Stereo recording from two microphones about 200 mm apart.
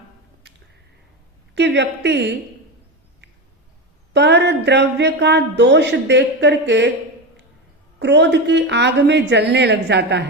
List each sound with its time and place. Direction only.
1.5 s speech: 60° right (ahead or behind)
4.1 s speech: 60° right (ahead or behind)
7.9 s speech: 60° right (ahead or behind)